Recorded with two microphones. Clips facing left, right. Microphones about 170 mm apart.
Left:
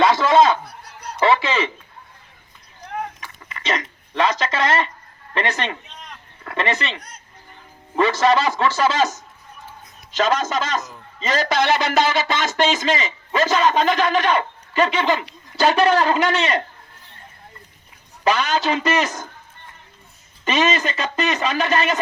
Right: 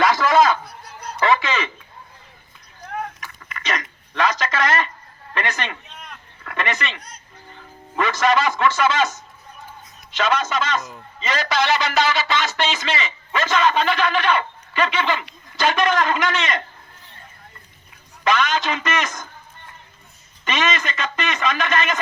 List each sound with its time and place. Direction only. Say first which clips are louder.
0.0 s a sound: left 2 dB; 25° left (ahead or behind)
1.2 s speech: left 2 dB; 30° left (ahead or behind)
3.2 s a sound: right 1 dB; 25° left (ahead or behind)
5.3 s a woman's voice: left 3 dB; 30° left (ahead or behind)
18.3 s a man's voice: left 1 dB; 35° left (ahead or behind)
20.4 s a man's voice: left 4 dB; 35° left (ahead or behind)